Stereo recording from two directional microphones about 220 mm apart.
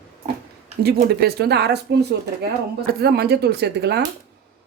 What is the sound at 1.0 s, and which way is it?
Speech, 45° right (ahead or behind).